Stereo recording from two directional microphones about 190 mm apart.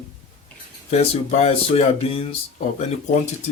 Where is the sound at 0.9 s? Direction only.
35° left (ahead or behind).